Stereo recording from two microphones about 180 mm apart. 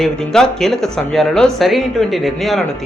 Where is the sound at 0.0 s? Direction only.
Centre (ahead or behind).